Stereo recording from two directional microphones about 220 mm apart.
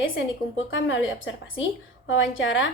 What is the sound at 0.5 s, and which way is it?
A woman's voice, 60° left (ahead or behind).